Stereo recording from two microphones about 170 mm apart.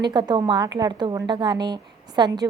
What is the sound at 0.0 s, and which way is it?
A woman's voice, 25° right (ahead or behind).